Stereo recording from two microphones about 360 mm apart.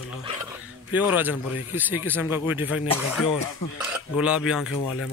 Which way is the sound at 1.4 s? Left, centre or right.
Left.